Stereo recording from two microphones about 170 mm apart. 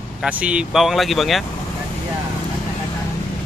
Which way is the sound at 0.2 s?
5° right (ahead or behind).